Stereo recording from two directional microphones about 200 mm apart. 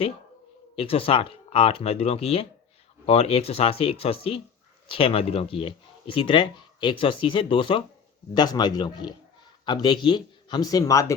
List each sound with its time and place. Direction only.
0.8 s speech: 30° left (ahead or behind)